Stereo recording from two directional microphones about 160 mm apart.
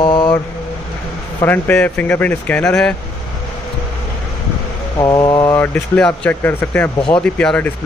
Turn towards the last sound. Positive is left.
turn(degrees=10)  # may be behind; listen again after turning